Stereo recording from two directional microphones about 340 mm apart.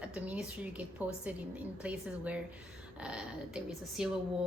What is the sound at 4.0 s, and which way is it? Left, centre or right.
Speech, centre.